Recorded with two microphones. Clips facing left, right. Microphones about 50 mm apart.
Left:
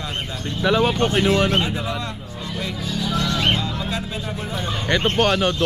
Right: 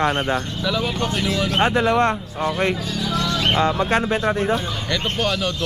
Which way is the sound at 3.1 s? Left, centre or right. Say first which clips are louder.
Even; left.